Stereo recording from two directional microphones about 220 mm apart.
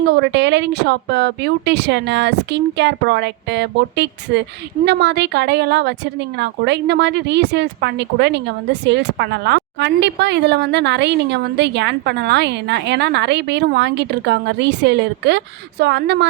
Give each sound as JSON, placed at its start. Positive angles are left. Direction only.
{"t": 0.1, "sound": "speech", "side_deg": -50}